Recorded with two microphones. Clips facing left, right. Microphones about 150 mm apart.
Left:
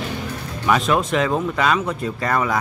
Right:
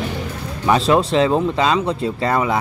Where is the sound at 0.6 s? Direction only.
25° right (ahead or behind).